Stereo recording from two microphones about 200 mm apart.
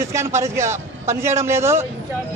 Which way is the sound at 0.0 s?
15° right (ahead or behind).